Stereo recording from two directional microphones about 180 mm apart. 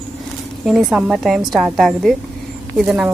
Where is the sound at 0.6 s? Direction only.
5° right (ahead or behind).